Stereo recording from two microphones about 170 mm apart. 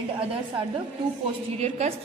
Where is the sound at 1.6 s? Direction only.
40° right (ahead or behind).